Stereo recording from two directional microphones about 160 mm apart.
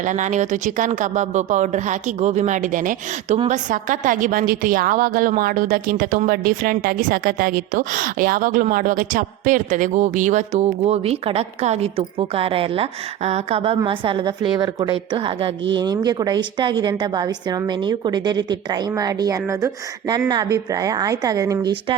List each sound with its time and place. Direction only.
0.0 s a woman's voice: 50° right (ahead or behind); by 21.7 s 20° right (ahead or behind)